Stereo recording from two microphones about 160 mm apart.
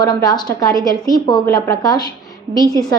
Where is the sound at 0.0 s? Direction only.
25° left (ahead or behind).